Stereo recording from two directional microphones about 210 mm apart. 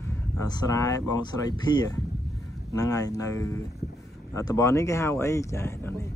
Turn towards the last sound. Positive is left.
turn(degrees=10)  # may be behind; listen again after turning